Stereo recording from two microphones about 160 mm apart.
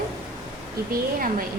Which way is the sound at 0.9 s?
60° right (ahead or behind).